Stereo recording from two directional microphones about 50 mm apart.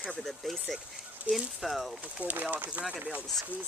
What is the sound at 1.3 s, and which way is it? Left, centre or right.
Speech, right.